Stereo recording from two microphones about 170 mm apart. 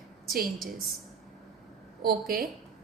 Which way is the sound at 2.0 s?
60° right (ahead or behind).